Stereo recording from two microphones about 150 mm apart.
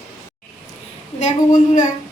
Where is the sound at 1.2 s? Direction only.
55° left (ahead or behind).